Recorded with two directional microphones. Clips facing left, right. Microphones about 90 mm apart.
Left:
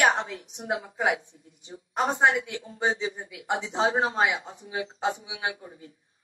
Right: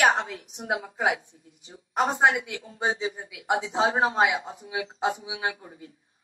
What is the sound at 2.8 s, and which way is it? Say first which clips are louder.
Speech: even; 35° right (ahead or behind).